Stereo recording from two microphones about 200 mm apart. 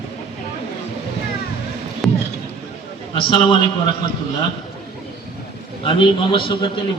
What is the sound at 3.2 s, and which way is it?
Speech, 25° left (ahead or behind).